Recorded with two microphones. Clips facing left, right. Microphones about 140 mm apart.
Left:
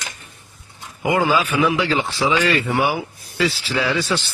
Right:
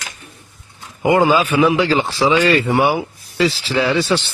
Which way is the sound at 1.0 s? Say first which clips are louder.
Right 5 dB; 30° right (ahead or behind).